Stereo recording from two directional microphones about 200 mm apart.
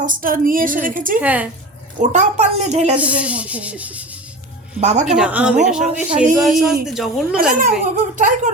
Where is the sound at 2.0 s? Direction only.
35° right (ahead or behind).